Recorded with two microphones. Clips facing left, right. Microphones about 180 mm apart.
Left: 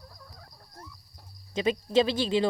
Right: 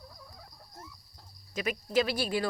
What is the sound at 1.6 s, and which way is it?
Speech, 25° left (ahead or behind).